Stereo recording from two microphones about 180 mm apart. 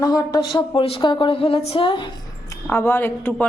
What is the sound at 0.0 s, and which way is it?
Speech, 20° left (ahead or behind).